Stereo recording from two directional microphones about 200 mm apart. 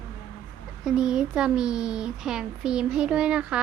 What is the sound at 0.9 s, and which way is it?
Speech, 5° right (ahead or behind).